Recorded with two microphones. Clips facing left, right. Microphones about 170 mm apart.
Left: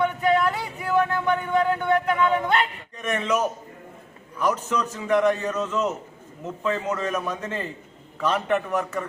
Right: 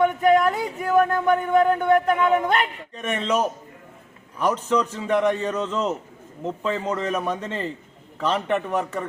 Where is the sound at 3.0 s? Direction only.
30° right (ahead or behind).